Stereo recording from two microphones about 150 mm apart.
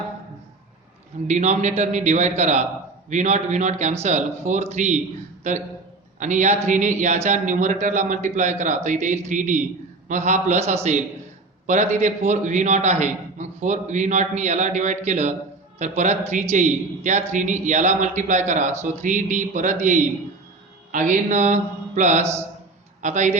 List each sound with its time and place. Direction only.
1.3 s a man's voice: 50° right (ahead or behind)